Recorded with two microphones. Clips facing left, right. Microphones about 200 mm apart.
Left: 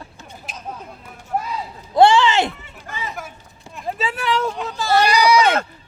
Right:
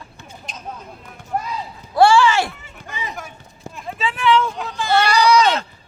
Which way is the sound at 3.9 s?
40° left (ahead or behind).